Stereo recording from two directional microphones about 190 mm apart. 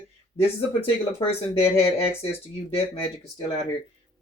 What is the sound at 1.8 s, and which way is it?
Speech, 30° left (ahead or behind).